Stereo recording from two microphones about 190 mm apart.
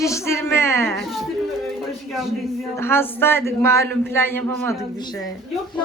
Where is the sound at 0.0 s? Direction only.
15° left (ahead or behind).